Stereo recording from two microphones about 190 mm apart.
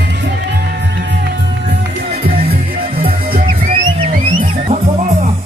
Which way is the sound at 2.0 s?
50° right (ahead or behind).